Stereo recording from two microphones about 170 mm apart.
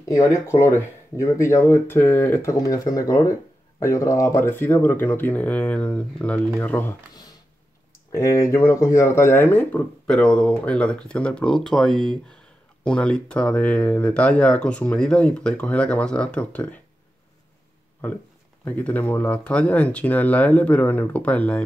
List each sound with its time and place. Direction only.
0.0 s speech: 20° left (ahead or behind)
8.1 s speech: 15° left (ahead or behind)
18.0 s speech: 10° left (ahead or behind)